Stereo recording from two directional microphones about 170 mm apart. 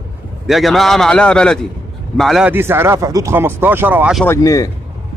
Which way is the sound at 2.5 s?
15° right (ahead or behind).